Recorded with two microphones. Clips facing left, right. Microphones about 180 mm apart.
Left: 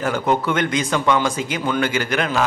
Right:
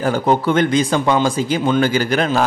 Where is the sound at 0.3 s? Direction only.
35° right (ahead or behind).